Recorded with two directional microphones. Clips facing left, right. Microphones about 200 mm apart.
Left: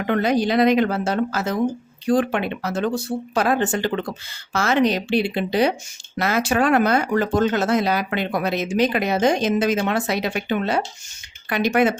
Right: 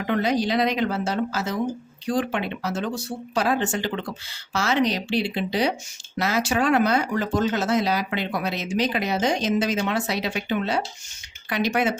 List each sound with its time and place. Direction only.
0.1 s speech: 55° left (ahead or behind)